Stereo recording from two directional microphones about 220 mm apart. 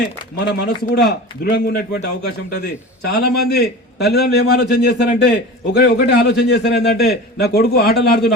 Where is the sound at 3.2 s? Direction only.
45° left (ahead or behind).